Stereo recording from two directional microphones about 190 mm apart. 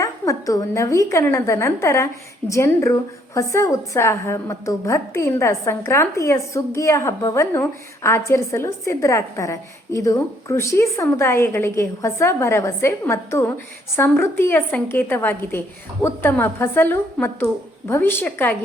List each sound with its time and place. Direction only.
0.0 s a woman's voice: 15° left (ahead or behind)